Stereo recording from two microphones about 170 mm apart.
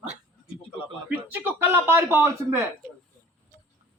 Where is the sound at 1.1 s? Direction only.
10° right (ahead or behind).